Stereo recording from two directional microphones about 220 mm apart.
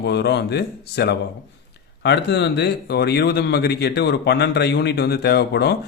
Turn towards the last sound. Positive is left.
turn(degrees=50)  # may be behind; listen again after turning